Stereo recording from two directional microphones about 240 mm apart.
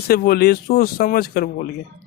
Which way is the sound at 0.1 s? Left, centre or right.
Left.